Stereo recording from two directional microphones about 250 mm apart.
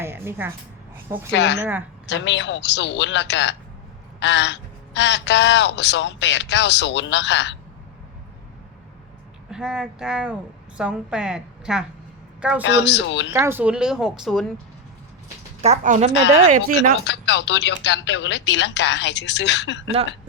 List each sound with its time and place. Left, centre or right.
0.0 s a woman's voice: centre
1.3 s speech: left
1.5 s a woman's voice: centre
2.0 s speech: left
9.5 s a woman's voice: centre
12.6 s speech: left
13.3 s a woman's voice: centre
15.6 s a woman's voice: right
17.0 s speech: left
19.8 s a woman's voice: right